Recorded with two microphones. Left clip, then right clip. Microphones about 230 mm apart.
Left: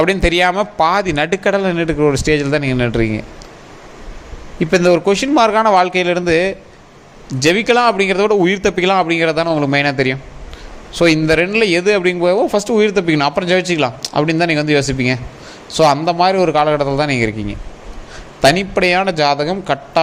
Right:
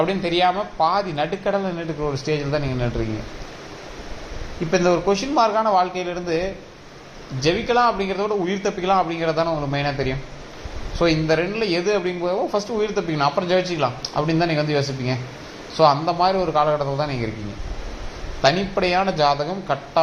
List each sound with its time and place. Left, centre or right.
0.0 s speech: left
4.7 s speech: left
18.4 s speech: left